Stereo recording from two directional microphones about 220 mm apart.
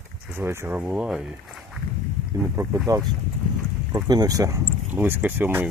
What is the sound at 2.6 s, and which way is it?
Speech, 15° right (ahead or behind).